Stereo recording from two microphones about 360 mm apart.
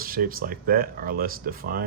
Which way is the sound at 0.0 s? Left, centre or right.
Right.